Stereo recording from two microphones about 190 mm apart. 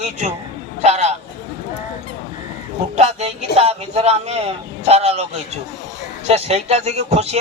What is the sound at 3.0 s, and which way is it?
Speech, 35° right (ahead or behind).